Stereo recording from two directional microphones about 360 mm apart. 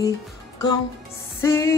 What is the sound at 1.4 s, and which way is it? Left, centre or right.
Speech, centre.